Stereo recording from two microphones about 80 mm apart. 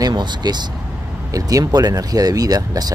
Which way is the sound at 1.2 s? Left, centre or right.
Right.